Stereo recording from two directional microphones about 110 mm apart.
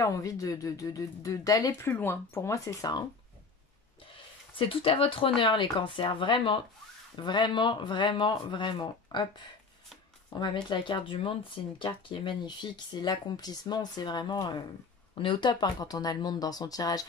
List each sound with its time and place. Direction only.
0.0 s speech: 30° left (ahead or behind)
4.1 s speech: 55° left (ahead or behind)
10.3 s speech: 45° left (ahead or behind)